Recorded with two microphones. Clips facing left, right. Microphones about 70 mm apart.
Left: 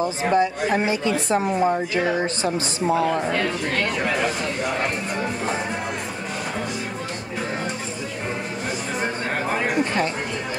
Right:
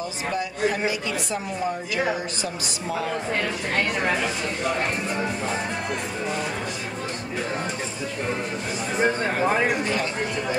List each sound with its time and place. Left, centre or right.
0.0 s a woman's voice: left